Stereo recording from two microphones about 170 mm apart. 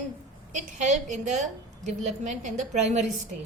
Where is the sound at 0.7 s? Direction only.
45° right (ahead or behind).